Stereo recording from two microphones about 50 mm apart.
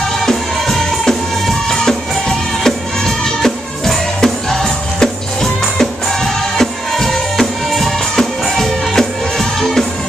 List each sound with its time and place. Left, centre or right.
0.2 s music: centre